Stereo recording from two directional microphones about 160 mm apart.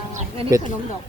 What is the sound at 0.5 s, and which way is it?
Speech, 20° right (ahead or behind).